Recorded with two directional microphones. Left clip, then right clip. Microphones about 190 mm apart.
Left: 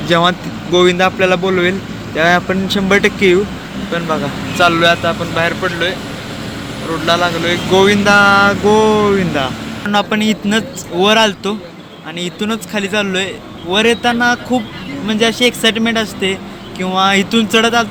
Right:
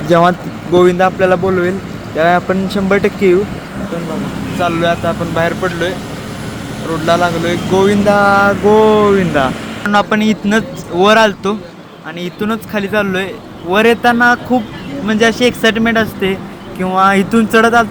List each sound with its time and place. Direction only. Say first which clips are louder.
0.1 s speech: right 3 dB; 5° left (ahead or behind)
0.7 s speech: right 1 dB; 10° right (ahead or behind)
4.6 s speech: left 3 dB; 10° right (ahead or behind)
7.0 s speech: right 1 dB; 20° right (ahead or behind)
8.2 s speech: even; 10° left (ahead or behind)